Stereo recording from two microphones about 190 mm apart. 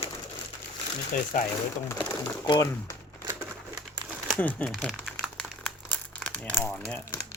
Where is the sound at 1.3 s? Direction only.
45° left (ahead or behind).